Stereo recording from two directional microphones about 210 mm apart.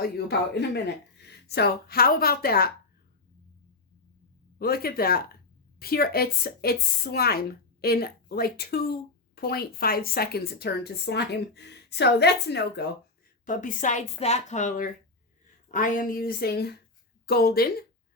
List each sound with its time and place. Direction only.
0.0 s a woman's voice: 50° left (ahead or behind)
4.6 s speech: 45° left (ahead or behind)
13.4 s speech: 40° left (ahead or behind)